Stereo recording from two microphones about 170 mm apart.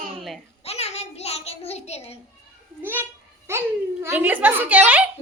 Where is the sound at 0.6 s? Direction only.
40° left (ahead or behind).